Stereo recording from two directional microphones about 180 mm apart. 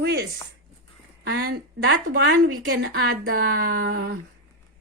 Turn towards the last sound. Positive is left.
turn(degrees=-60)  # may be behind; listen again after turning